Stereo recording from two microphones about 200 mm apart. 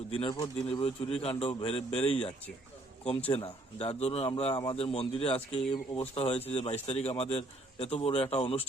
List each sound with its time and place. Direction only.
0.1 s speech: 25° left (ahead or behind)